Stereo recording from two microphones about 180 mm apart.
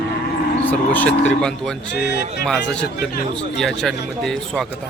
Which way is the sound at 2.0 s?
70° left (ahead or behind).